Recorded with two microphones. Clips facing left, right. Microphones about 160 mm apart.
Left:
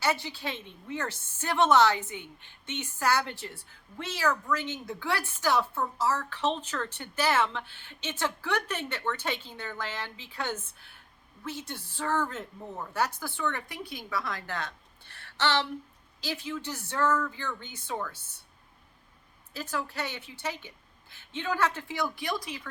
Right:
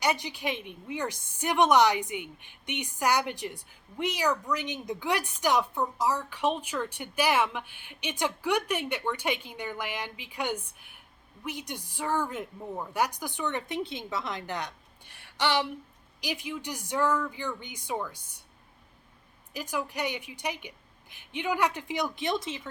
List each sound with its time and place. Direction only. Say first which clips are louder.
0.0 s a woman's voice: right 1 dB; 15° right (ahead or behind)
19.5 s a woman's voice: right 1 dB; 15° right (ahead or behind)